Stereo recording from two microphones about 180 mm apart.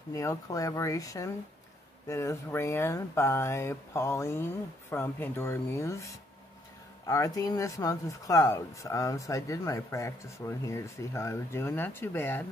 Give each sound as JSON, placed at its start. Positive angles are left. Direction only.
{"t": 0.1, "sound": "speech", "side_deg": 15}